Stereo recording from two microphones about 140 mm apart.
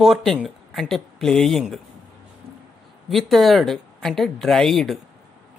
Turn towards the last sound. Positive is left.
turn(degrees=0)  # may be behind; listen again after turning